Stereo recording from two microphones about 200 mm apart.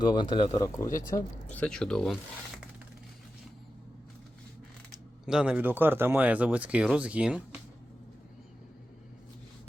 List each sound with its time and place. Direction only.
0.0 s speech: 20° left (ahead or behind)
1.1 s speech: 5° left (ahead or behind)
4.9 s speech: 5° right (ahead or behind)